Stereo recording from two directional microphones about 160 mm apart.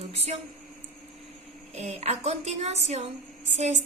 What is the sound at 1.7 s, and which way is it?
A woman's voice, 45° right (ahead or behind).